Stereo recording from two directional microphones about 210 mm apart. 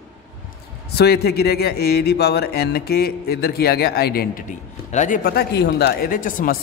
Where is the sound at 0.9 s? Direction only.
50° left (ahead or behind).